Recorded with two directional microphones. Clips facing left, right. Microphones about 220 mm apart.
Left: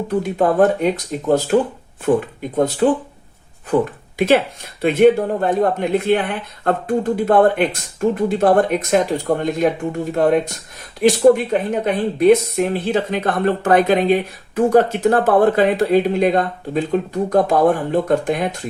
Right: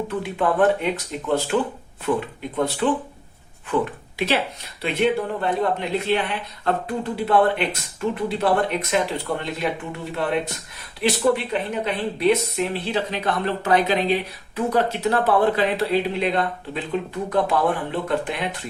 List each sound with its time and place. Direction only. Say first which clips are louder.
0.2 s speech: left 5 dB; 40° left (ahead or behind)
4.8 s speech: left 9 dB; 50° left (ahead or behind)